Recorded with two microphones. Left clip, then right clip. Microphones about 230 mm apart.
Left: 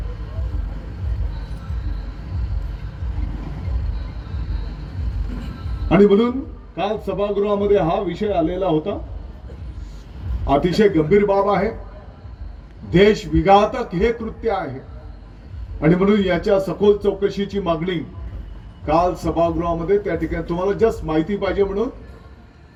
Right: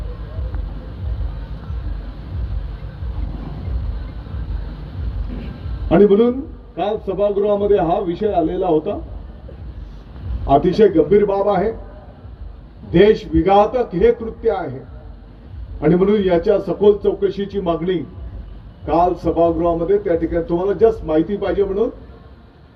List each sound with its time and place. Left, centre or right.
5.9 s a man's voice: left
10.4 s a man's voice: left
12.9 s a man's voice: left
15.8 s a man's voice: left